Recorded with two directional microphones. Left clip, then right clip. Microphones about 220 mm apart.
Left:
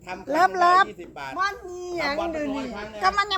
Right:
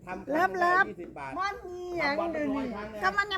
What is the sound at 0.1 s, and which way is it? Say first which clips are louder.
A child's voice: left 7 dB; 35° left (ahead or behind).